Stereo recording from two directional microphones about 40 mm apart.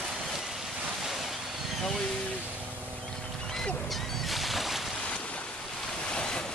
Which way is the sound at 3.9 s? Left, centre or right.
Centre.